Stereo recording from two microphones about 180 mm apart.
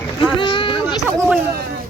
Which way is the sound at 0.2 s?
25° left (ahead or behind).